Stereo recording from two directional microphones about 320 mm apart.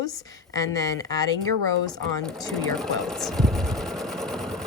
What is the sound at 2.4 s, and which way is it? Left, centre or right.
Sewing machine, centre.